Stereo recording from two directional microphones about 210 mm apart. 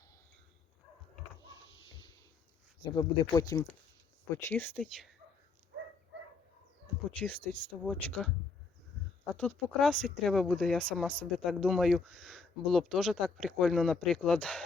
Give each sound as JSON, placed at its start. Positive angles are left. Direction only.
{"t": 2.8, "sound": "speech", "side_deg": 20}
{"t": 7.2, "sound": "speech", "side_deg": 5}
{"t": 9.3, "sound": "speech", "side_deg": 5}